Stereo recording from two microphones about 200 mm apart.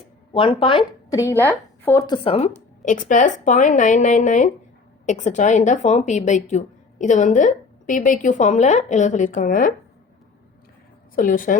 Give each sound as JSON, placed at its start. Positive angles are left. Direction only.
{"t": 0.3, "sound": "a woman's voice", "side_deg": 25}
{"t": 2.8, "sound": "a woman's voice", "side_deg": 40}
{"t": 11.1, "sound": "a woman's voice", "side_deg": 45}